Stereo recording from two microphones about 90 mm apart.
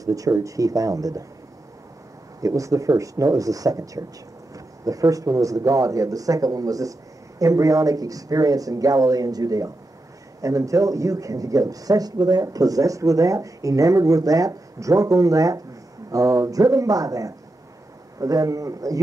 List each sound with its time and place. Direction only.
0.0 s speech: 40° right (ahead or behind)
2.4 s speech: 40° right (ahead or behind)